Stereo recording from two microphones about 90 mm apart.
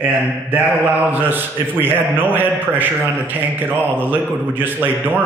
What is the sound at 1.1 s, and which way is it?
Speech, 20° right (ahead or behind).